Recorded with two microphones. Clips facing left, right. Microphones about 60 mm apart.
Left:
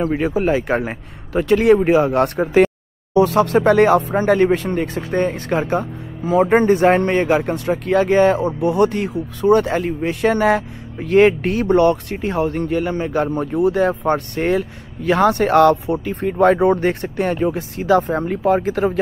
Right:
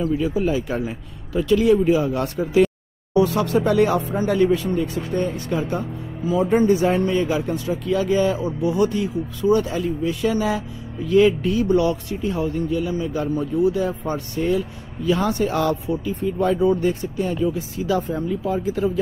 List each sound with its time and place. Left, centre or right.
0.0 s speech: left